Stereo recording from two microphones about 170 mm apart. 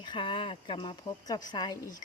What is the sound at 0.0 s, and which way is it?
Speech, 30° left (ahead or behind).